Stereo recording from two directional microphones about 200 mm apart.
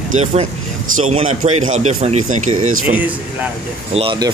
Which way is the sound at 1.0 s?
35° right (ahead or behind).